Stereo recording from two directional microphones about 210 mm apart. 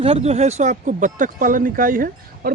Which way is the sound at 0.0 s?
30° right (ahead or behind).